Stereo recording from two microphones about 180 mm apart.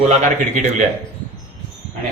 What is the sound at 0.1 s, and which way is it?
Speech, 40° right (ahead or behind).